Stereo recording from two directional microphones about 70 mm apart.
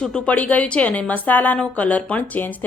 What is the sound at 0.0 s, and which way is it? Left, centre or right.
A woman's voice, centre.